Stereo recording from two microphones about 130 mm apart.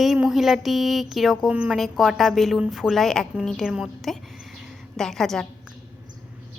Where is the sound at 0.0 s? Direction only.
Centre (ahead or behind).